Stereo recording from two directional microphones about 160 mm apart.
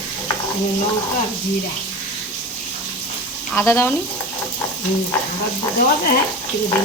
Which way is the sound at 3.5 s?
15° left (ahead or behind).